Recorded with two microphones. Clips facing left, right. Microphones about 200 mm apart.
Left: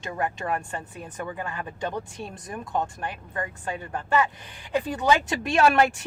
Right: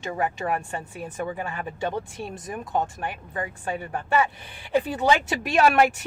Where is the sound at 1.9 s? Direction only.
5° right (ahead or behind).